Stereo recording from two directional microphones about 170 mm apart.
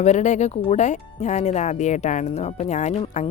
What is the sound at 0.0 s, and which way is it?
Speech, 45° left (ahead or behind).